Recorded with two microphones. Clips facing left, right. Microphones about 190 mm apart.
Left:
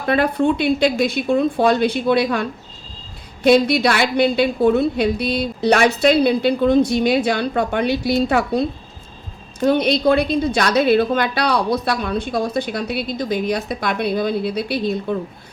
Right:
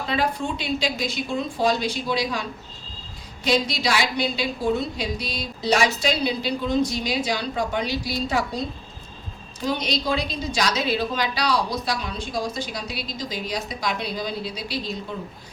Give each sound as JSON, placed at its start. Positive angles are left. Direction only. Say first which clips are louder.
{"t": 0.0, "sound": "a woman's voice", "louder": "left 8 dB", "side_deg": 60}